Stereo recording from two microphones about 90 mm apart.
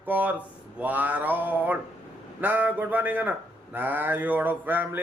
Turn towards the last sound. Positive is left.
turn(degrees=-20)  # may be behind; listen again after turning